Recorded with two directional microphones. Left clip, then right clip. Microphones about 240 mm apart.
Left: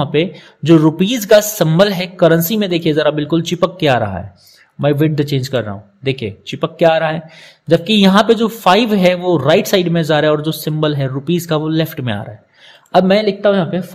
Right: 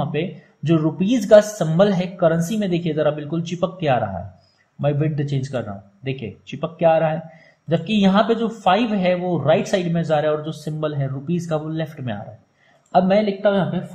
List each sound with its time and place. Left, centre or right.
0.0 s a man's voice: left